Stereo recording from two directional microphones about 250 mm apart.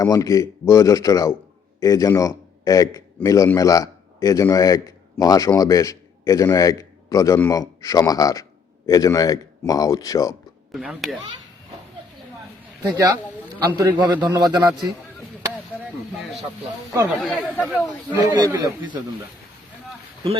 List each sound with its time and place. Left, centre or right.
0.0 s a man's voice: centre
10.7 s speech: centre
12.9 s a man's voice: centre
17.2 s speech: centre
18.1 s a man's voice: centre